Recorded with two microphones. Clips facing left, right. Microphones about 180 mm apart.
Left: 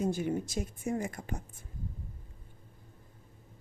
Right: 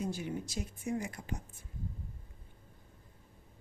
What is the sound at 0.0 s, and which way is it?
A woman's voice, 50° left (ahead or behind).